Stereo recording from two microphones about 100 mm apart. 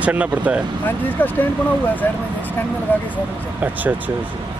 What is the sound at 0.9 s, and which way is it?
Speech, 20° left (ahead or behind).